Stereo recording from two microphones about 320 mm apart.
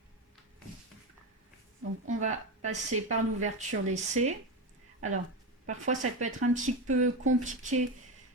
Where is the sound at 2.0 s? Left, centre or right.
Right.